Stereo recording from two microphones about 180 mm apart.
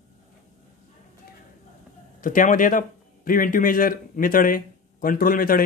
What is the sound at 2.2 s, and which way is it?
A man's voice, 50° left (ahead or behind).